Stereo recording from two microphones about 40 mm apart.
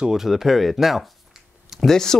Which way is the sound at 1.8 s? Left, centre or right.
Centre.